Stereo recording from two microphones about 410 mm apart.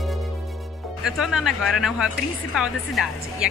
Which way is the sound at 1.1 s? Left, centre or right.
Centre.